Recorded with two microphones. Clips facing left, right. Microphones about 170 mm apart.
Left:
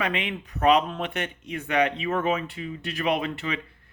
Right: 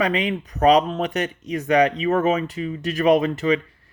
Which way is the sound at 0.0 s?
40° right (ahead or behind).